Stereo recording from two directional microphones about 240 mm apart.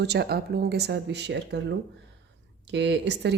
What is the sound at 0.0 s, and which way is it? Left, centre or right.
Speech, right.